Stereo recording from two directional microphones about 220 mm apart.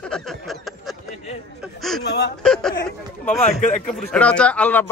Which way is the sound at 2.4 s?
5° left (ahead or behind).